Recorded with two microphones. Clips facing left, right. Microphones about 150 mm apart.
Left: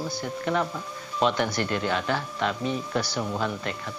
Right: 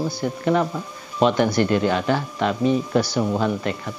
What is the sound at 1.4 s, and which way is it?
Speech, 20° right (ahead or behind).